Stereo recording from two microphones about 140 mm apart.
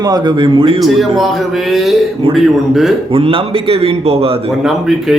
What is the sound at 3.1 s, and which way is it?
A man's voice, 40° right (ahead or behind).